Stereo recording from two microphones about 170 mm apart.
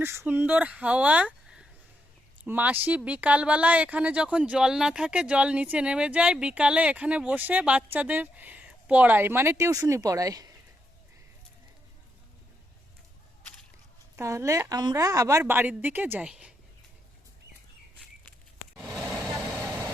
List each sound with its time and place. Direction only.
0.0 s speech: 15° right (ahead or behind)
14.2 s speech: 15° right (ahead or behind)
18.9 s vehicle: centre (ahead or behind)
19.6 s vehicle: 20° right (ahead or behind)